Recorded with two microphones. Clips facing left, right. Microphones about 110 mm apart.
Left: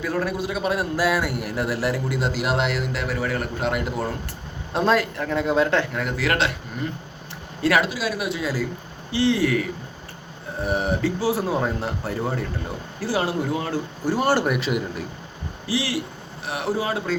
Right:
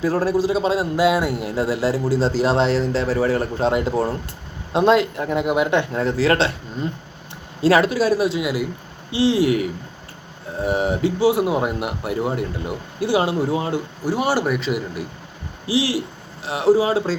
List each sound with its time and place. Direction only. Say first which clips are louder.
0.0 s a man's voice: right 6 dB; 30° right (ahead or behind)
7.8 s a man's voice: right 7 dB; 40° right (ahead or behind)
8.4 s speech: right 3 dB; 15° right (ahead or behind)
14.0 s speech: even; 10° right (ahead or behind)
15.7 s speech: right 5 dB; 25° right (ahead or behind)